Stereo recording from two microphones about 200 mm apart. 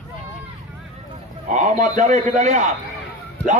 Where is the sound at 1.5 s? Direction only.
35° right (ahead or behind).